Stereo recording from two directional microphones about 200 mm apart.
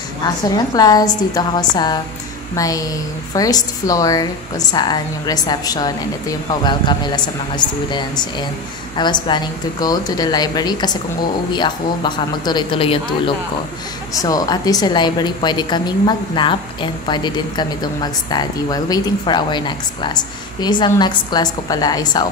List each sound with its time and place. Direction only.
0.7 s a woman's voice: 20° left (ahead or behind)
14.1 s a woman's voice: 20° left (ahead or behind)